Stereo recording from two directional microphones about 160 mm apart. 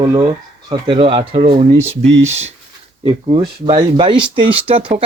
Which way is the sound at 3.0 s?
30° right (ahead or behind).